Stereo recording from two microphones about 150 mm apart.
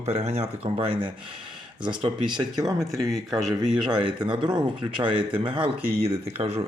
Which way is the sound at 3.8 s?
35° right (ahead or behind).